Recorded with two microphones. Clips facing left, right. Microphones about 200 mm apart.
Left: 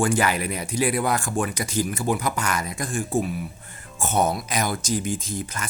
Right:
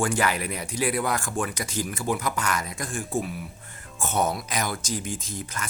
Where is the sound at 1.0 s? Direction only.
15° left (ahead or behind).